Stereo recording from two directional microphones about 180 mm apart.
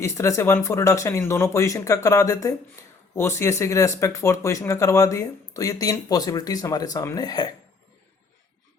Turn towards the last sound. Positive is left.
turn(degrees=20)  # may be behind; listen again after turning